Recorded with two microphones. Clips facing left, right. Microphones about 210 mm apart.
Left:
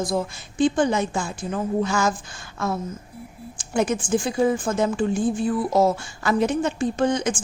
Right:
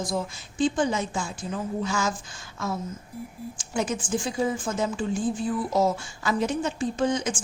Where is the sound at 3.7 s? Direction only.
60° left (ahead or behind).